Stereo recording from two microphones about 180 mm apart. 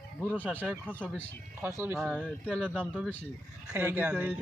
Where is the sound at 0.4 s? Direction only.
10° right (ahead or behind).